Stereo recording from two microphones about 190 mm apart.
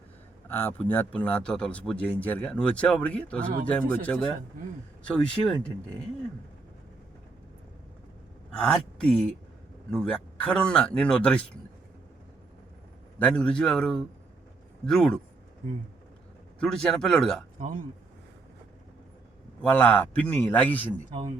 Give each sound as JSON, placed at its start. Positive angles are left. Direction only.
{"t": 0.4, "sound": "a man's voice", "side_deg": 10}
{"t": 8.5, "sound": "speech", "side_deg": 5}
{"t": 13.1, "sound": "speech", "side_deg": 5}
{"t": 16.6, "sound": "speech", "side_deg": 5}
{"t": 17.6, "sound": "a man's voice", "side_deg": -45}
{"t": 19.7, "sound": "a man's voice", "side_deg": 10}